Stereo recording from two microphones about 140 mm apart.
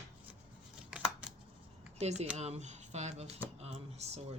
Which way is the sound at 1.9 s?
50° right (ahead or behind).